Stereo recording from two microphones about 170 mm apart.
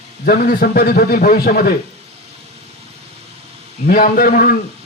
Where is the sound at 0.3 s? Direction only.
60° left (ahead or behind).